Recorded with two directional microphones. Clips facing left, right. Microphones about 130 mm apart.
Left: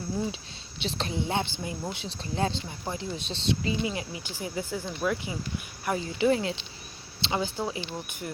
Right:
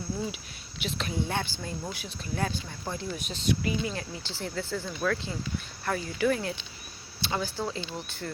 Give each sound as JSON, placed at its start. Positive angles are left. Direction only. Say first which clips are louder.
{"t": 0.8, "sound": "a woman's voice", "louder": "left 1 dB", "side_deg": 30}
{"t": 1.2, "sound": "speech", "louder": "left 3 dB", "side_deg": 20}